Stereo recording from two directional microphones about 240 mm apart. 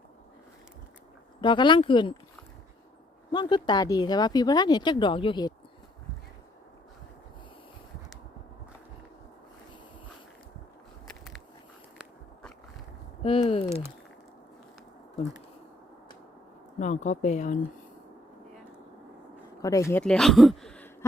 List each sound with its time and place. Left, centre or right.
1.4 s speech: centre
3.3 s speech: centre
11.9 s biting: centre
13.2 s a sound: left
16.8 s speech: left
19.6 s speech: centre